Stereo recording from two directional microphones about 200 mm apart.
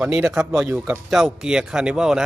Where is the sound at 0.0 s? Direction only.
5° right (ahead or behind).